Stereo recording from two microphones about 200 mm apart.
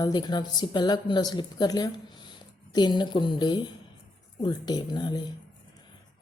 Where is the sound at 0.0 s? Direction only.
20° left (ahead or behind).